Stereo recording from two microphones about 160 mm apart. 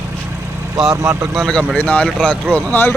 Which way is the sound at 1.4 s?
5° left (ahead or behind).